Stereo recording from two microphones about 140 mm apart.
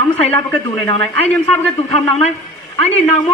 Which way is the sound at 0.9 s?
40° left (ahead or behind).